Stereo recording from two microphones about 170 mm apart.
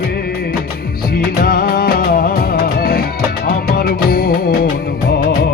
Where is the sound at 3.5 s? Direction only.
60° left (ahead or behind).